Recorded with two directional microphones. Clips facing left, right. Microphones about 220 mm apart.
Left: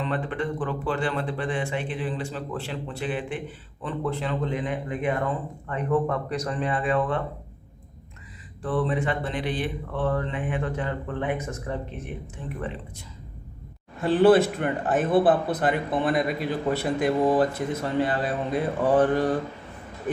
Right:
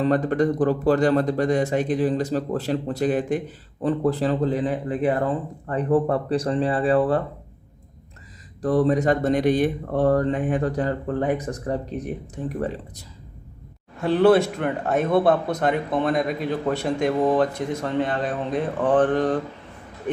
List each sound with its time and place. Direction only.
0.0 s speech: 40° right (ahead or behind)
8.6 s speech: 40° right (ahead or behind)
14.0 s speech: centre (ahead or behind)